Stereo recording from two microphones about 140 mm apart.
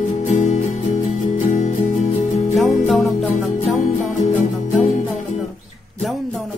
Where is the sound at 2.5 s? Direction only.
Centre (ahead or behind).